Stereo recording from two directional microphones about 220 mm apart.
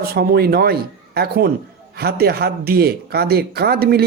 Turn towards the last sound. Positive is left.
turn(degrees=-45)  # may be behind; listen again after turning